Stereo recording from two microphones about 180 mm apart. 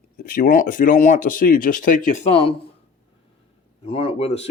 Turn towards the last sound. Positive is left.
turn(degrees=35)  # may be behind; listen again after turning